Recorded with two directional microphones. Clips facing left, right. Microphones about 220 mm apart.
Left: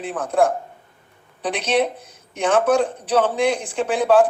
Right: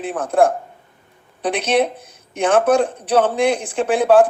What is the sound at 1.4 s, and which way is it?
Speech, 65° right (ahead or behind).